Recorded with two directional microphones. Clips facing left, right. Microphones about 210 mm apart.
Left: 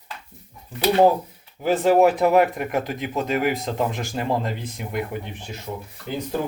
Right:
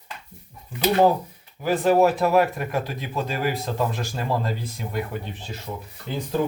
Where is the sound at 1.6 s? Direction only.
20° left (ahead or behind).